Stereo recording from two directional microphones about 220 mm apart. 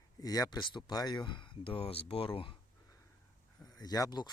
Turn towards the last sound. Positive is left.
turn(degrees=20)  # may be behind; listen again after turning